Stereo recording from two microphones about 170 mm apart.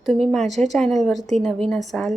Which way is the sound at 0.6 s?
5° left (ahead or behind).